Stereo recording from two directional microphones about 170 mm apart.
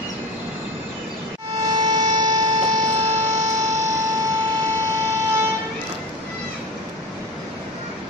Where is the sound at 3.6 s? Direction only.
20° right (ahead or behind).